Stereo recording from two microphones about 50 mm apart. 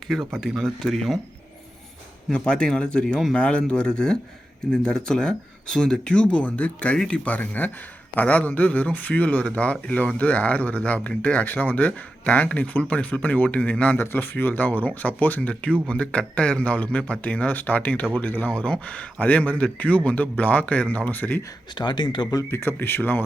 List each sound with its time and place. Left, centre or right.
0.6 s speech: centre
2.3 s speech: left
7.3 s speech: left
13.9 s speech: left
18.6 s speech: left
22.4 s speech: left